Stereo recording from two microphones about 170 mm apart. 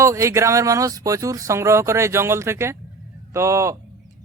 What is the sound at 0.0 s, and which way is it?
Speech, 15° right (ahead or behind).